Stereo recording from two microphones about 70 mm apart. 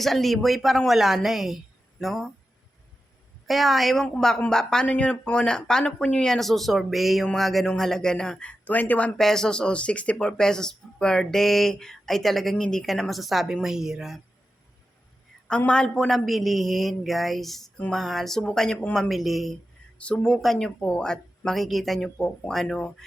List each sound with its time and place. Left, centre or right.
0.0 s a woman's voice: centre
3.4 s a woman's voice: centre
4.0 s speech: centre
6.3 s a woman's voice: centre; by 9.1 s left
9.1 s speech: centre
15.4 s a woman's voice: centre